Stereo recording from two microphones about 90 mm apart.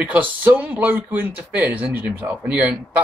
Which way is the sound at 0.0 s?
20° right (ahead or behind).